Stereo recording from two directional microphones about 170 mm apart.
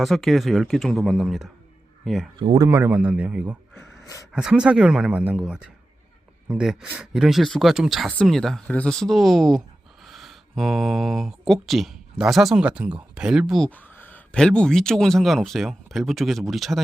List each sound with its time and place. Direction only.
0.0 s speech: centre (ahead or behind)
2.4 s speech: 25° right (ahead or behind)
2.6 s a man's voice: 15° right (ahead or behind)
4.0 s a sound: 20° left (ahead or behind)
4.3 s speech: 5° right (ahead or behind)
13.7 s speech: 10° left (ahead or behind)